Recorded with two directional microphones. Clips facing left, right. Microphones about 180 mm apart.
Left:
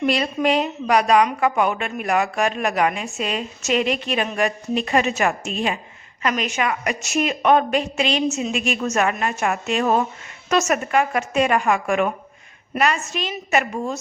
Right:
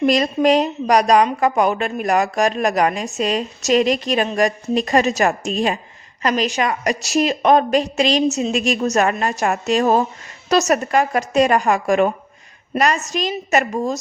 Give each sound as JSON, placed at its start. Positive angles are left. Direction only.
{"t": 0.0, "sound": "a woman's voice", "side_deg": -40}